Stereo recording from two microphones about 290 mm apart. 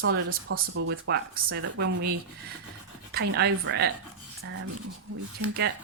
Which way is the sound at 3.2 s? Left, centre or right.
Right.